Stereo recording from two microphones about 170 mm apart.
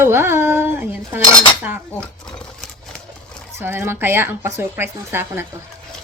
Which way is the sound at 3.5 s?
15° right (ahead or behind).